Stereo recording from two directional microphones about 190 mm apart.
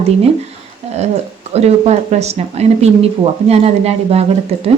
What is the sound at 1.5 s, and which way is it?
A woman's voice, 35° right (ahead or behind).